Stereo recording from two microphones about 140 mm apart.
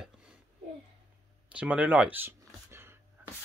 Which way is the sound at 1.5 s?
10° right (ahead or behind).